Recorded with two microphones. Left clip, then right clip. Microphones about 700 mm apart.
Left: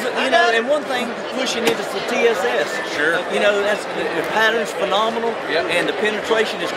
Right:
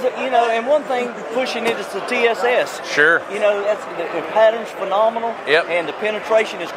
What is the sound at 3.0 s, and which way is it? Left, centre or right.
Speech, right.